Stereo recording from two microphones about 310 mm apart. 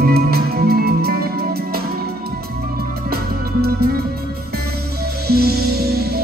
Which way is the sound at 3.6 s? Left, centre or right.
Right.